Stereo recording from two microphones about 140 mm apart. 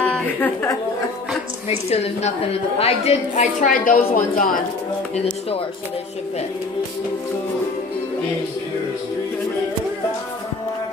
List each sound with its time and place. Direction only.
0.0 s a sound: 10° left (ahead or behind)
1.9 s a woman's voice: 45° left (ahead or behind)
3.6 s a woman's voice: 75° left (ahead or behind)
5.1 s a woman's voice: 45° left (ahead or behind)